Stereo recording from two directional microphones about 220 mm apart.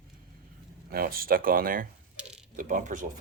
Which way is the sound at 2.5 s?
35° right (ahead or behind).